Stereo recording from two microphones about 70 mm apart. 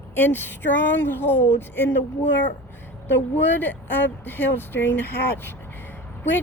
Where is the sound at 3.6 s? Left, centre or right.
Left.